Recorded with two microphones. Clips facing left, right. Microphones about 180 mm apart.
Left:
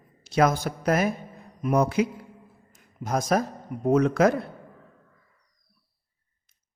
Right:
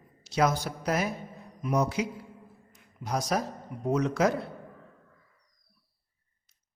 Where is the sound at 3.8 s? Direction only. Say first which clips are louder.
Left 6 dB; 55° left (ahead or behind).